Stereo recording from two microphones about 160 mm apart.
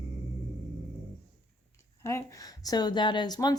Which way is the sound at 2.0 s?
20° left (ahead or behind).